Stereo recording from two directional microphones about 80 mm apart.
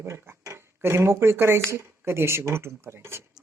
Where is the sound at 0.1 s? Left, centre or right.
Right.